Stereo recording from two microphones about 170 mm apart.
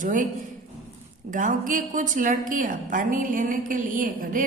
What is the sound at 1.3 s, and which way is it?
A woman's voice, 50° right (ahead or behind).